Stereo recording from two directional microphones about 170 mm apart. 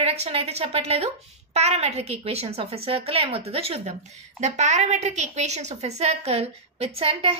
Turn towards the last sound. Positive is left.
turn(degrees=-35)  # may be behind; listen again after turning